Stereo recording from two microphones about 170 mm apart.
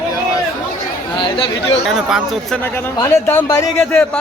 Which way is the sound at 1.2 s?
30° left (ahead or behind).